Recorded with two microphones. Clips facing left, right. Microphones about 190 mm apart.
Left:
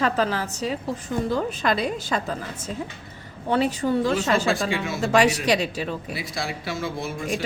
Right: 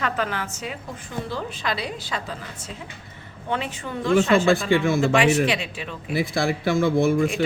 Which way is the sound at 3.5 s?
35° left (ahead or behind).